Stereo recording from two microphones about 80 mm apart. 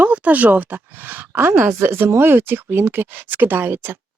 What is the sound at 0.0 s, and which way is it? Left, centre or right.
Speech, centre.